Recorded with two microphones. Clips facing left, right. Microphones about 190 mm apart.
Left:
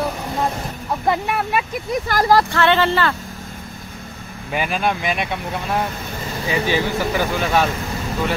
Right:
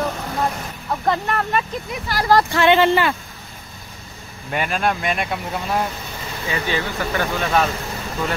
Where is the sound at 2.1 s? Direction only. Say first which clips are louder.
Left 3 dB; 50° left (ahead or behind).